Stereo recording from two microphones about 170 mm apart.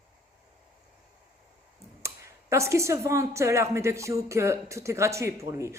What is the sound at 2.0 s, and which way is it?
A woman's voice, 15° right (ahead or behind).